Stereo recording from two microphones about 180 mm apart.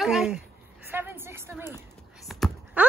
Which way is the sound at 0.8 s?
10° right (ahead or behind).